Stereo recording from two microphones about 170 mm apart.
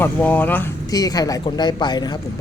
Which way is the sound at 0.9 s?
20° left (ahead or behind).